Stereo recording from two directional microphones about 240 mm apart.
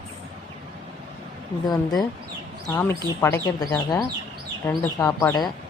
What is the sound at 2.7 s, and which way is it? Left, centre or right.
A man's voice, centre.